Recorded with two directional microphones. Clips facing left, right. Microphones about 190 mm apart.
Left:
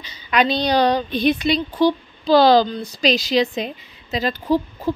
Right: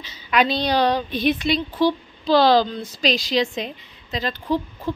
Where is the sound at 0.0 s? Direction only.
5° right (ahead or behind).